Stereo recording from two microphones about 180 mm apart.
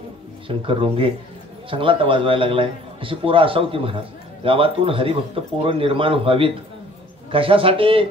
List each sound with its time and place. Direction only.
0.5 s a man's voice: 30° right (ahead or behind)